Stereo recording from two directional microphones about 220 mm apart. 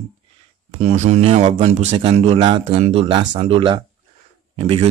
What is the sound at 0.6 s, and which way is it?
Speech, 30° right (ahead or behind).